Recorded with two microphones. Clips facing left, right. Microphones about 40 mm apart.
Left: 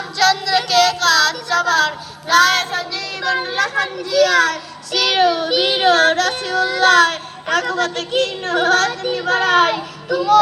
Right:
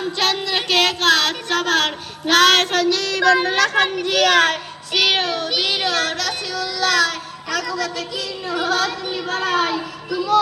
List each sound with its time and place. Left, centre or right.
0.2 s a sound: right
4.9 s child singing: centre
5.1 s child singing: centre
5.4 s speech: centre
5.6 s yodeling: left
5.9 s speech: left